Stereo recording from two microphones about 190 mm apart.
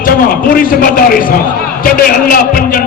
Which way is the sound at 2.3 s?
50° left (ahead or behind).